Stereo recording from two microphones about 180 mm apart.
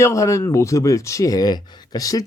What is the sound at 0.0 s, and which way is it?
Speech, 15° left (ahead or behind).